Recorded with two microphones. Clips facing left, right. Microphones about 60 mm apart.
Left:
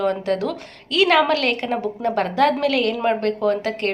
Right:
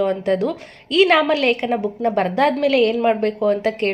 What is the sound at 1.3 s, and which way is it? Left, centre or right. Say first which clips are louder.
A woman's voice: right 3 dB; centre.